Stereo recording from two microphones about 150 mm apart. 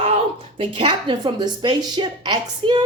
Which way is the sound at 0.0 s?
40° right (ahead or behind).